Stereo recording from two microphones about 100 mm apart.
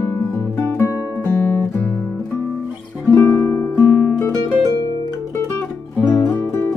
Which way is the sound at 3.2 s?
25° left (ahead or behind).